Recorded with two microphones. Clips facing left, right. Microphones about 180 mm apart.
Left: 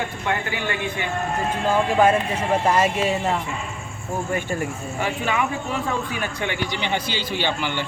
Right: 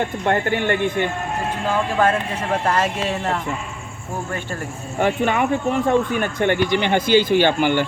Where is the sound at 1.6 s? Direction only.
10° left (ahead or behind).